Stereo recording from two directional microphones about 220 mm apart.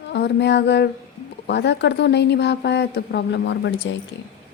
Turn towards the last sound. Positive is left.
turn(degrees=55)  # may be behind; listen again after turning